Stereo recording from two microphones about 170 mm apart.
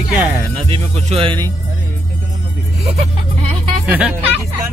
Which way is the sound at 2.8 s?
35° right (ahead or behind).